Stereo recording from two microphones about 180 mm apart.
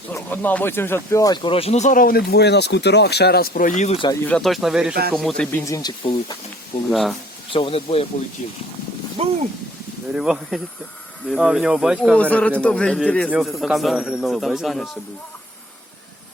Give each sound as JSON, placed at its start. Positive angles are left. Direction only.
{"t": 0.1, "sound": "speech", "side_deg": 10}
{"t": 4.3, "sound": "speech", "side_deg": 0}
{"t": 5.5, "sound": "speech", "side_deg": 15}
{"t": 6.9, "sound": "speech", "side_deg": 0}
{"t": 7.5, "sound": "speech", "side_deg": 30}
{"t": 9.2, "sound": "speech", "side_deg": -35}
{"t": 10.2, "sound": "speech", "side_deg": 0}